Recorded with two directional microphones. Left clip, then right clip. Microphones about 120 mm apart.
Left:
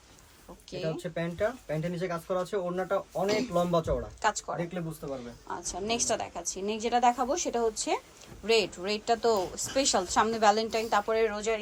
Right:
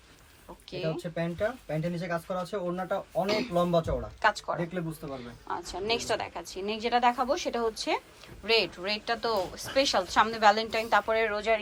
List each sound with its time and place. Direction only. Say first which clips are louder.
0.7 s a woman's voice: right 1 dB; 20° left (ahead or behind)
0.9 s speech: even; centre (ahead or behind)
3.2 s a woman's voice: left 2 dB; 20° left (ahead or behind)
3.5 s speech: right 1 dB; centre (ahead or behind)
4.2 s a woman's voice: right 6 dB; 20° left (ahead or behind)